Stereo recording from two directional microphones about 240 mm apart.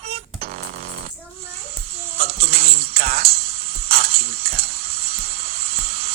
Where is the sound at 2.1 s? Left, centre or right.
Right.